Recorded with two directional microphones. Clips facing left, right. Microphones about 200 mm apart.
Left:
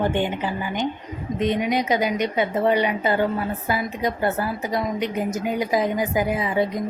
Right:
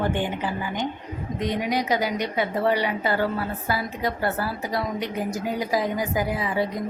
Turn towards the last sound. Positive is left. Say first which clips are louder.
# left 3 dB
turn(degrees=20)  # may be behind; listen again after turning